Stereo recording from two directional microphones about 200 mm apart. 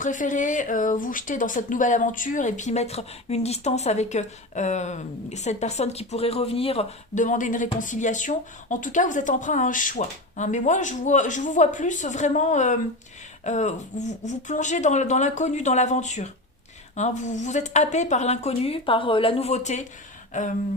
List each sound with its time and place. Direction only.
0.0 s speech: 40° left (ahead or behind)